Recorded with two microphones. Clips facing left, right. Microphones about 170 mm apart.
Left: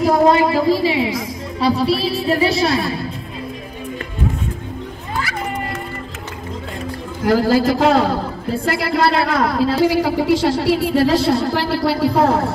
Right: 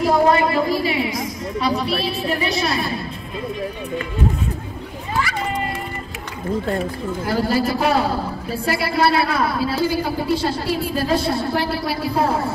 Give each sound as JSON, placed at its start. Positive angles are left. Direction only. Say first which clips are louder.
{"t": 0.5, "sound": "a woman's voice", "louder": "left 4 dB", "side_deg": 30}
{"t": 7.2, "sound": "a man's voice", "louder": "left 6 dB", "side_deg": 90}
{"t": 8.6, "sound": "a woman's voice", "louder": "left 1 dB", "side_deg": 70}